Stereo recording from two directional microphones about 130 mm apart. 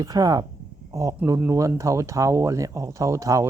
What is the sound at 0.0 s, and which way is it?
Speech, 30° right (ahead or behind).